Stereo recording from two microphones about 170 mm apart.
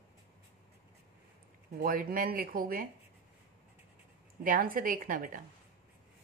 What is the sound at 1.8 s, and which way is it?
A woman's voice, 60° right (ahead or behind).